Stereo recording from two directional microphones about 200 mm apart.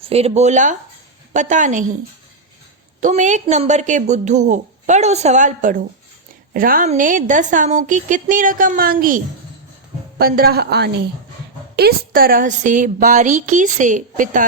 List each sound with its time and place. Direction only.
0.0 s a woman's voice: 30° right (ahead or behind)
3.0 s a woman's voice: 35° right (ahead or behind)